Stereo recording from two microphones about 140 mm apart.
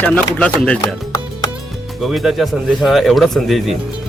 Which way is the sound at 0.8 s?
25° left (ahead or behind).